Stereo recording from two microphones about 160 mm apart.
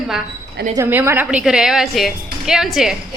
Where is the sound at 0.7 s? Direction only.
15° right (ahead or behind).